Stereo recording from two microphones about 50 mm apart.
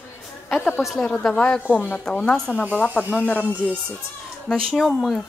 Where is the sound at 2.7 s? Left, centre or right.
Left.